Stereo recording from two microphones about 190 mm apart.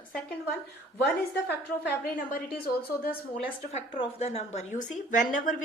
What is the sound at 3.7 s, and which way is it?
A woman's voice, 35° left (ahead or behind).